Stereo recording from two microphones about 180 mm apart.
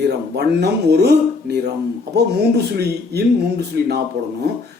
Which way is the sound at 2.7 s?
65° right (ahead or behind).